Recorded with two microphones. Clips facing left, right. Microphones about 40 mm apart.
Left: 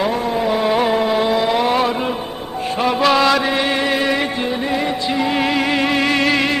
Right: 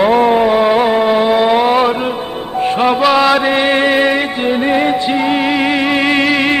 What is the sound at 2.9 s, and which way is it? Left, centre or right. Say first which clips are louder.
Music: right 2 dB; centre.